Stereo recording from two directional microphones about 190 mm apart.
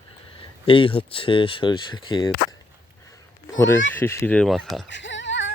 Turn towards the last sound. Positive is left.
turn(degrees=75)  # may be behind; listen again after turning